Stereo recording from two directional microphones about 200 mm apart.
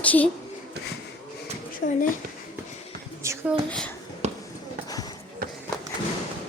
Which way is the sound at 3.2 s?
15° right (ahead or behind).